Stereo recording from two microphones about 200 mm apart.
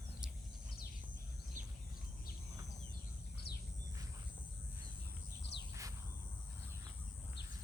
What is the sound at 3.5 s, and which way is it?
Bird, 55° left (ahead or behind).